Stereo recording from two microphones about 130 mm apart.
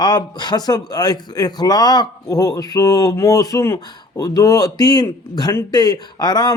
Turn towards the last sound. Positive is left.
turn(degrees=30)  # may be behind; listen again after turning